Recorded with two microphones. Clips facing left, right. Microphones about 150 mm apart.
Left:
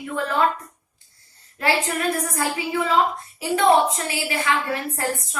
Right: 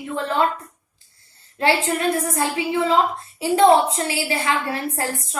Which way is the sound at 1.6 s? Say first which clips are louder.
Right 3 dB; 25° right (ahead or behind).